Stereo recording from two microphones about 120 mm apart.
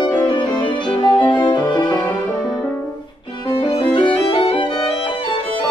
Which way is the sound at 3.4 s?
45° left (ahead or behind).